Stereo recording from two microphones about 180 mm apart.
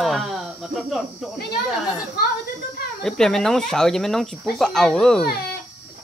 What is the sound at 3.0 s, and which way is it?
Speech, 5° left (ahead or behind).